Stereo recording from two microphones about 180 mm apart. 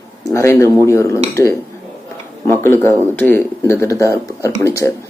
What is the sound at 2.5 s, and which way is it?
Speech, 15° left (ahead or behind).